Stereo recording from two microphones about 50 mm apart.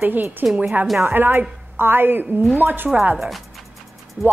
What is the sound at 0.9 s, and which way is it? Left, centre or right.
A woman's voice, right.